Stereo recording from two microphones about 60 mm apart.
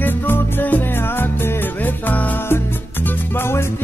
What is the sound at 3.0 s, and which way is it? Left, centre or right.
Music, left.